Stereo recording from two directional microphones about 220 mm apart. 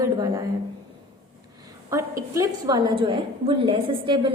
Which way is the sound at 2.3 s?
15° right (ahead or behind).